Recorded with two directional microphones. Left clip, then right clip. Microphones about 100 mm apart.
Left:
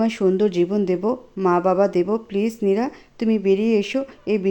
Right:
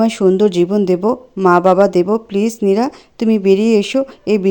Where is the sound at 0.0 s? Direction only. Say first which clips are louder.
Right 7 dB; 45° right (ahead or behind).